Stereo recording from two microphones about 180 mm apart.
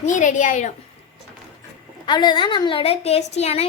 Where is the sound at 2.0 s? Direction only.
25° left (ahead or behind).